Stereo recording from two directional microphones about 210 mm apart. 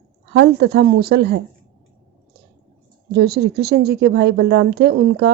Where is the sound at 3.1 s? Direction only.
50° right (ahead or behind).